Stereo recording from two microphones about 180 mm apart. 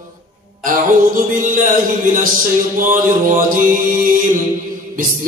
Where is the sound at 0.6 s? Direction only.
50° right (ahead or behind).